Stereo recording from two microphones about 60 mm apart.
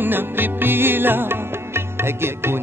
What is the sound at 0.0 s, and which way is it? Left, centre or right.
Music, right.